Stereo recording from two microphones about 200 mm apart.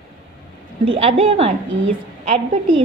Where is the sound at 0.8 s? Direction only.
30° right (ahead or behind).